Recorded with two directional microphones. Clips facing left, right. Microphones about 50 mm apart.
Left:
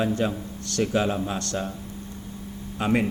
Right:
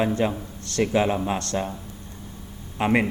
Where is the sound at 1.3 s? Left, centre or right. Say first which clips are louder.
Right 2 dB; right.